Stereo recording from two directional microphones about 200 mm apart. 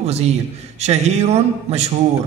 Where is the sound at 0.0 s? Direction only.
30° right (ahead or behind).